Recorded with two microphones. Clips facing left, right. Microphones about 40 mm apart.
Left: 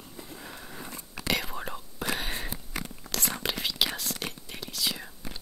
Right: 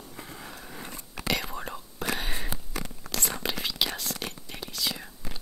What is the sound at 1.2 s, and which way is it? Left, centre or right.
Whispering, centre.